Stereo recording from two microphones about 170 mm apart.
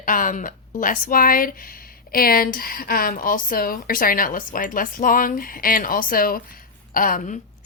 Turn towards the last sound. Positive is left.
turn(degrees=55)  # may be behind; listen again after turning